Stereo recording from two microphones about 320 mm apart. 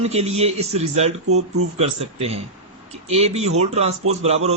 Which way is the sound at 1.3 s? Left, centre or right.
Right.